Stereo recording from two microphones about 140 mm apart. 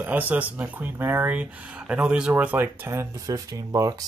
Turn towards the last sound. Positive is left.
turn(degrees=-25)  # may be behind; listen again after turning